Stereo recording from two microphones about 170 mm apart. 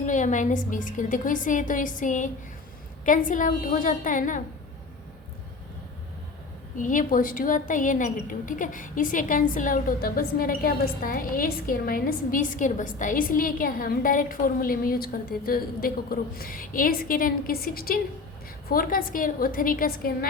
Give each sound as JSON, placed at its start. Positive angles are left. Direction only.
{"t": 0.0, "sound": "a woman's voice", "side_deg": 45}
{"t": 6.7, "sound": "a woman's voice", "side_deg": 50}